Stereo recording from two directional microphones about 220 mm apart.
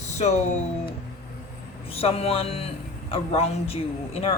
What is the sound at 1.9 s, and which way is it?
A woman's voice, 25° left (ahead or behind).